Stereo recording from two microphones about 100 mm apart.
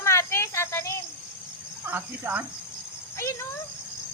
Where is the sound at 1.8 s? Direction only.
15° right (ahead or behind).